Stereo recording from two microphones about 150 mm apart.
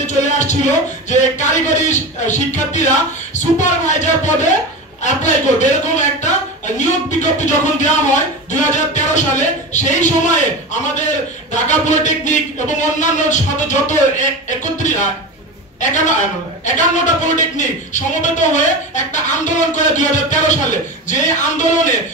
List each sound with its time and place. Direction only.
0.0 s music: 50° left (ahead or behind)
1.0 s a man's voice: 55° left (ahead or behind)